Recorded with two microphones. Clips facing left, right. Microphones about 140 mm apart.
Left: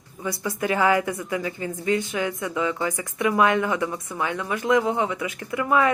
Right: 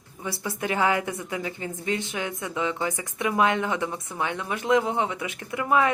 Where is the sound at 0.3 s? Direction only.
25° right (ahead or behind).